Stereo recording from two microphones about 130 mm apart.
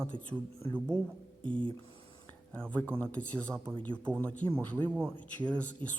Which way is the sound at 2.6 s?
10° left (ahead or behind).